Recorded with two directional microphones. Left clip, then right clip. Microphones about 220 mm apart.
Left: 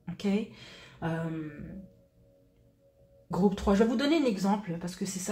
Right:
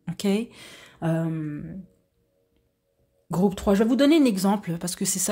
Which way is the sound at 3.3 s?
45° right (ahead or behind).